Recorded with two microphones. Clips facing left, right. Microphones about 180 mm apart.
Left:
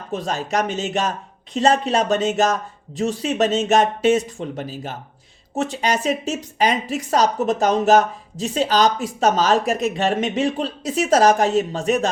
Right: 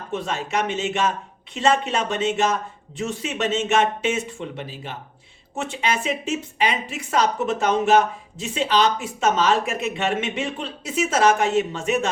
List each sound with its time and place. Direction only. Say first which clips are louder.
0.1 s speech: left 2 dB; 40° left (ahead or behind)